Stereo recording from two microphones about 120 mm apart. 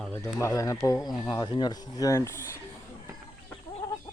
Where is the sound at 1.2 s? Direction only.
40° left (ahead or behind); by 2.6 s 25° left (ahead or behind).